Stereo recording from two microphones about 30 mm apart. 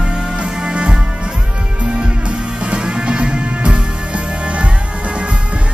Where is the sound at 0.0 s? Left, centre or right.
Right.